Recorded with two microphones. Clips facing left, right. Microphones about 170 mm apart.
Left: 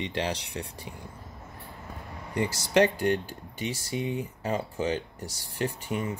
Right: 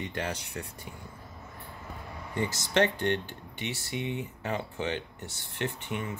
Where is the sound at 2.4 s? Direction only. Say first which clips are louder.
Left 4 dB; 35° left (ahead or behind).